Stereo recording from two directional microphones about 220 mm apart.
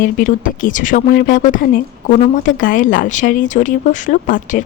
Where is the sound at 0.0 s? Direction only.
40° left (ahead or behind).